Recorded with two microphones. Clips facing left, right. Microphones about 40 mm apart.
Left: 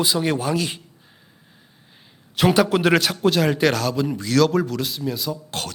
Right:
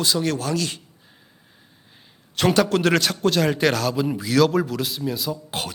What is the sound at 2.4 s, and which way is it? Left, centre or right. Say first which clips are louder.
A man's voice: left 1 dB; centre.